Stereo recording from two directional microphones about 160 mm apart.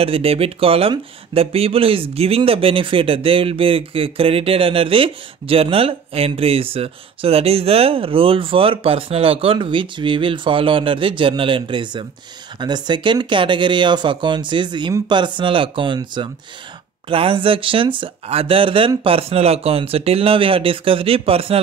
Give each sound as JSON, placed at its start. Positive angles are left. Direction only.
{"t": 0.0, "sound": "speech", "side_deg": -35}